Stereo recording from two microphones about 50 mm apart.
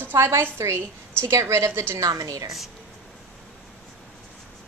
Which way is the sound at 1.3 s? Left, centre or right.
Right.